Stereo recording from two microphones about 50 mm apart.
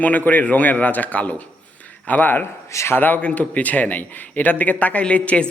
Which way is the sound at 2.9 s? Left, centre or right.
Left.